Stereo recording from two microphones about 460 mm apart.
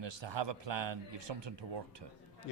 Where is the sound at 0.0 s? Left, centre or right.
Right.